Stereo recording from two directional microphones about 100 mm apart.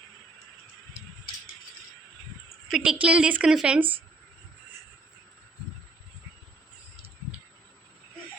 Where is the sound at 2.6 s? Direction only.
5° right (ahead or behind).